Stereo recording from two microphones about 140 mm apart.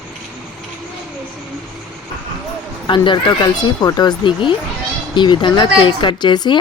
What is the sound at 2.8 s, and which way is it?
Speech, 35° left (ahead or behind).